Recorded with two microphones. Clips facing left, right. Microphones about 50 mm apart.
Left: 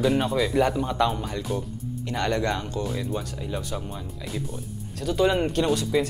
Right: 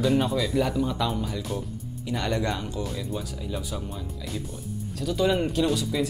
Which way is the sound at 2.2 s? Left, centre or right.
Left.